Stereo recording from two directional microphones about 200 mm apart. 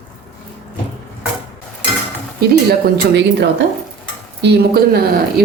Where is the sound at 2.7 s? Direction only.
60° right (ahead or behind).